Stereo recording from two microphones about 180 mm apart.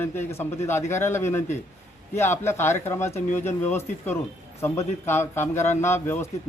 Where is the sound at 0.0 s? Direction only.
15° left (ahead or behind).